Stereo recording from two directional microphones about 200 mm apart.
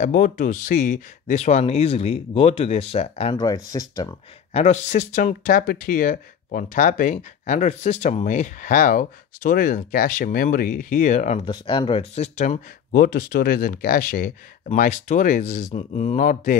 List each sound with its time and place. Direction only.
0.0 s speech: 40° left (ahead or behind)
3.4 s speech: 20° left (ahead or behind)
4.6 s speech: 35° left (ahead or behind)